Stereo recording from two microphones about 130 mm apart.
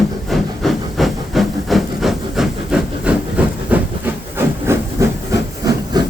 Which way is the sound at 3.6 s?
15° right (ahead or behind).